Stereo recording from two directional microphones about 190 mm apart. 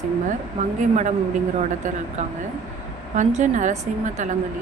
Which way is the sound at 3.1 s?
40° right (ahead or behind).